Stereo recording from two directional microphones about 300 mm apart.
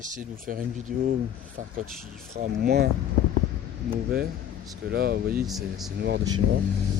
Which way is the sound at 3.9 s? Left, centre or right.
Right.